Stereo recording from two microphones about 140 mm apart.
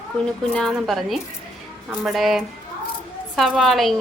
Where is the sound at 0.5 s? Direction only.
Centre (ahead or behind).